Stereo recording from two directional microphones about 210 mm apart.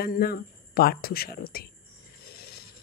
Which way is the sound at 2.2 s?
45° left (ahead or behind).